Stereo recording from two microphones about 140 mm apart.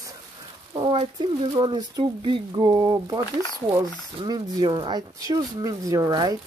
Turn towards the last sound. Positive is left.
turn(degrees=-30)  # may be behind; listen again after turning